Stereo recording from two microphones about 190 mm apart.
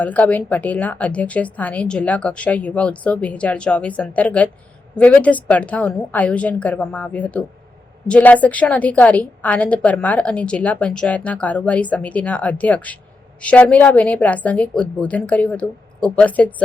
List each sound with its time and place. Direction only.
0.0 s a woman's voice: 10° left (ahead or behind)